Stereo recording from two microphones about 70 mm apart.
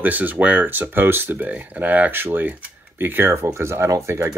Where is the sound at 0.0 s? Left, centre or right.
Right.